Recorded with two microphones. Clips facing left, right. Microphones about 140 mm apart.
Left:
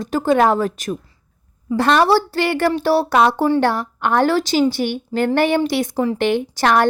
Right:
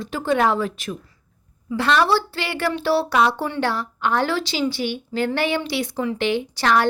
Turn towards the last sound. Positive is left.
turn(degrees=50)  # may be behind; listen again after turning